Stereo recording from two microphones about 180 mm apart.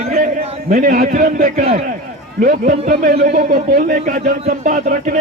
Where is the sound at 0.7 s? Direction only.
50° right (ahead or behind).